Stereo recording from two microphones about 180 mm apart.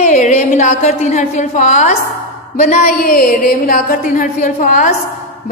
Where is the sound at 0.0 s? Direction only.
40° left (ahead or behind).